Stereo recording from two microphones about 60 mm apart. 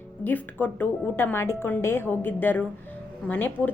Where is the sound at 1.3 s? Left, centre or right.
Left.